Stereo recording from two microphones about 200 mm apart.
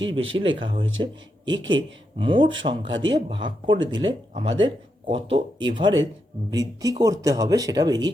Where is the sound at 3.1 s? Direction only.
25° right (ahead or behind).